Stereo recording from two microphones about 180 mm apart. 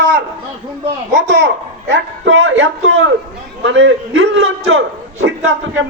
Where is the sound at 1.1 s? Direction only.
80° right.